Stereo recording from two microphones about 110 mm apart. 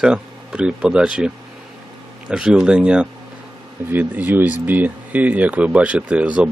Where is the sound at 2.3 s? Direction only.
10° right (ahead or behind).